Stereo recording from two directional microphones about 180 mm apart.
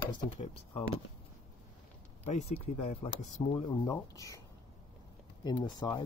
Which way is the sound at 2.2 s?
40° left (ahead or behind).